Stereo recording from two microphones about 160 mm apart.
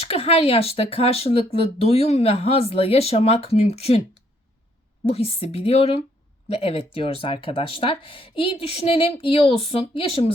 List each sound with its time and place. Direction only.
0.0 s speech: 40° left (ahead or behind)
5.0 s speech: 40° left (ahead or behind)